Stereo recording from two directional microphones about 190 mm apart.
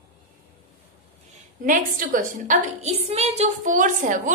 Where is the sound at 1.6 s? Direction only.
45° right (ahead or behind).